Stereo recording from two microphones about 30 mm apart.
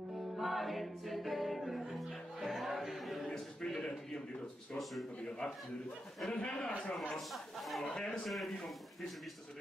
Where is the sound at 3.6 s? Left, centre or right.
Left.